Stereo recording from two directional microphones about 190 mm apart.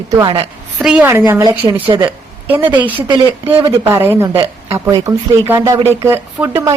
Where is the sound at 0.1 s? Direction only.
25° right (ahead or behind).